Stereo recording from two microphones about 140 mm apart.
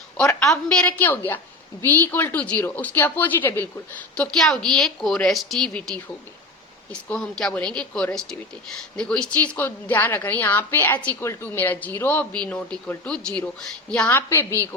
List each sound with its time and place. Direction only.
0.3 s a woman's voice: 5° left (ahead or behind)
7.1 s a woman's voice: 5° left (ahead or behind)
14.1 s a woman's voice: 15° left (ahead or behind)